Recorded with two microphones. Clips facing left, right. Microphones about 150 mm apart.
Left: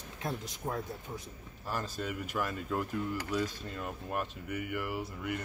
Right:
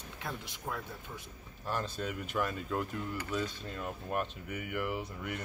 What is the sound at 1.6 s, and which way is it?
Speech, 10° left (ahead or behind).